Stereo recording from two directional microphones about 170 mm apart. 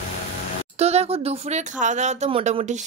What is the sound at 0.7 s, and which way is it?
Speech, 40° right (ahead or behind).